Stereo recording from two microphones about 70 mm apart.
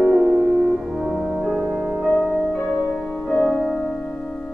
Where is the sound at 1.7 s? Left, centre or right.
Right.